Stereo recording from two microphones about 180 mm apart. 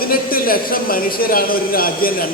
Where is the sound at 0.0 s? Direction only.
55° left (ahead or behind).